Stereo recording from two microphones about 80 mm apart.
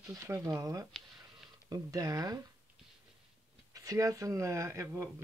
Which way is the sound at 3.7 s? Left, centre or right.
Right.